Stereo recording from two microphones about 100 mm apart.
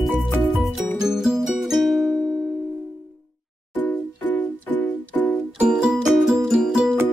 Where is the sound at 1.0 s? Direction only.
5° right (ahead or behind).